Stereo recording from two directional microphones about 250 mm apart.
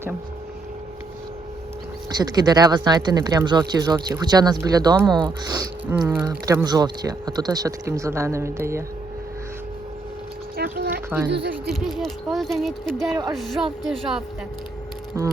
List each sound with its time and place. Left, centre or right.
2.0 s speech: centre
10.6 s a sound: right
11.9 s speech: centre
15.1 s speech: centre